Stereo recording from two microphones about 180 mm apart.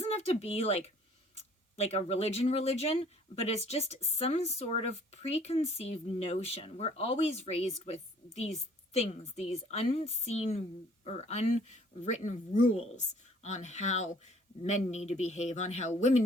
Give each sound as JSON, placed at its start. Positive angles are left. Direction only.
{"t": 0.1, "sound": "speech", "side_deg": 35}